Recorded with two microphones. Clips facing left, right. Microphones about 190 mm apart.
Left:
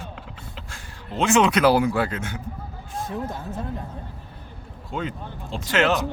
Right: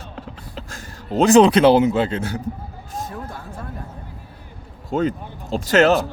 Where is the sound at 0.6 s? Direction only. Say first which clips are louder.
Right 5 dB; 40° right (ahead or behind); by 2.2 s 20° right (ahead or behind).